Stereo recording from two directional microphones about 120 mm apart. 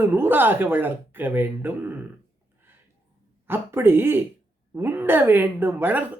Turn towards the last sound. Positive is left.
turn(degrees=-15)  # may be behind; listen again after turning